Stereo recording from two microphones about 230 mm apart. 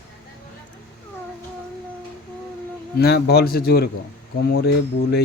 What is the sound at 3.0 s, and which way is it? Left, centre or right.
A man's voice, left.